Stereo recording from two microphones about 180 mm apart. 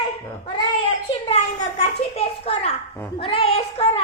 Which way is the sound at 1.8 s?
35° left (ahead or behind).